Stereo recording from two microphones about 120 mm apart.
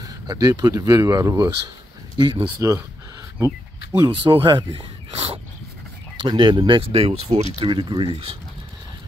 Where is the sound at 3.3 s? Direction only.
25° right (ahead or behind).